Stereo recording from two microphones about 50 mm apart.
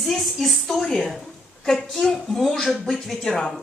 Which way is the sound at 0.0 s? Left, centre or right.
Centre.